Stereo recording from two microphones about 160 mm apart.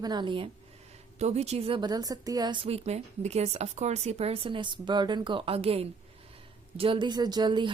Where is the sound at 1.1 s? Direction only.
45° right (ahead or behind).